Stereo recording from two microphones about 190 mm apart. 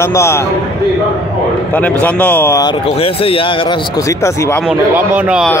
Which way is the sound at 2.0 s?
10° left (ahead or behind).